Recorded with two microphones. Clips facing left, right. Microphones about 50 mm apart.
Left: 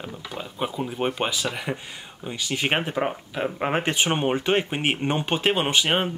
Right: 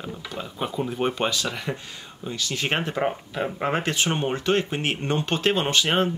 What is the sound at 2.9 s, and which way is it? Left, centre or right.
Speech, centre.